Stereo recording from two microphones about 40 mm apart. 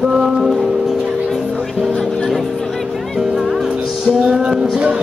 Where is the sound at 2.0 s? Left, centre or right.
Centre.